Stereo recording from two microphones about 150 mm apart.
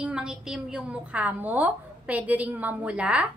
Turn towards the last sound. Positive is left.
turn(degrees=-10)  # may be behind; listen again after turning